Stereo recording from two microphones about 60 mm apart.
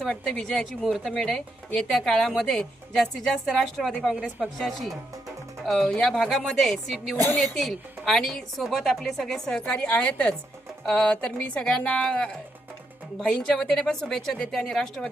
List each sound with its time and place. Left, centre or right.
0.3 s a woman's voice: centre
9.6 s a woman's voice: left